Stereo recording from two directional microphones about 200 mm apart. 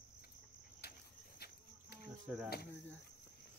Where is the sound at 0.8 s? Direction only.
50° left (ahead or behind).